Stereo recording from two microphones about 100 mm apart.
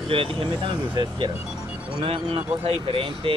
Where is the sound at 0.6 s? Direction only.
55° right (ahead or behind).